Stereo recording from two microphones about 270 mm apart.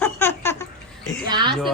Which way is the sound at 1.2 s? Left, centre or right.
Centre.